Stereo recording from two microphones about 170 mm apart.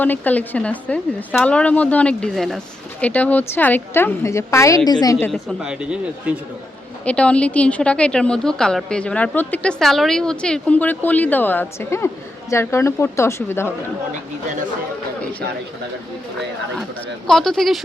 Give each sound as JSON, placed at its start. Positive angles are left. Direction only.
{"t": 0.0, "sound": "a woman's voice", "side_deg": 10}
{"t": 5.3, "sound": "speech", "side_deg": 0}
{"t": 7.0, "sound": "speech", "side_deg": 5}
{"t": 15.2, "sound": "speech", "side_deg": 10}
{"t": 17.2, "sound": "speech", "side_deg": 5}